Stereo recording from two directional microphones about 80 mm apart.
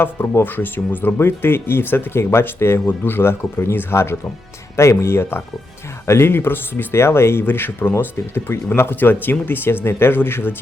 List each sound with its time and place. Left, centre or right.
0.0 s speech: left